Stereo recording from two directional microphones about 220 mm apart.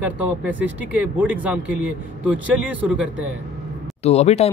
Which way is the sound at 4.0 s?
30° left (ahead or behind).